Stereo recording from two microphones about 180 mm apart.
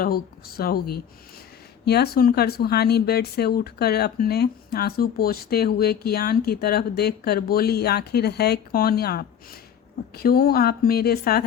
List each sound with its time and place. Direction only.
0.0 s speech: 55° left (ahead or behind)